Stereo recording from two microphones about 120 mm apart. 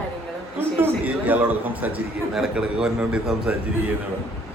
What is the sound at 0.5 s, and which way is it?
A man's voice, 15° right (ahead or behind).